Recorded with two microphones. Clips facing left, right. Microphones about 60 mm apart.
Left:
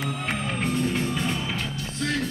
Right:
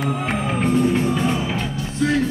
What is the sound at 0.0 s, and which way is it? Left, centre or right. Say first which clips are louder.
Music: right 6 dB; centre.